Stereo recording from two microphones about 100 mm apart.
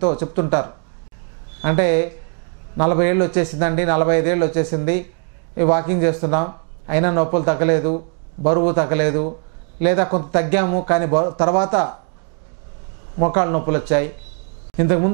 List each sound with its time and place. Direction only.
0.0 s speech: 20° right (ahead or behind)
13.2 s speech: 15° right (ahead or behind)